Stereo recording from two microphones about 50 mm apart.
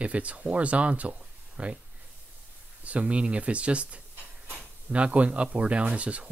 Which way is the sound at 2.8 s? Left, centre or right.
Right.